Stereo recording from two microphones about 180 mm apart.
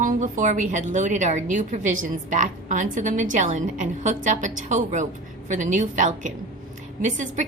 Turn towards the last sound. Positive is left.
turn(degrees=-45)  # may be behind; listen again after turning